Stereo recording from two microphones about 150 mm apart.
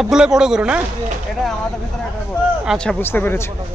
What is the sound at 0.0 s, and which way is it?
Speech, 5° right (ahead or behind).